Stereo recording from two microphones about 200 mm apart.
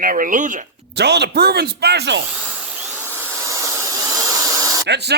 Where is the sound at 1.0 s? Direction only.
55° right (ahead or behind).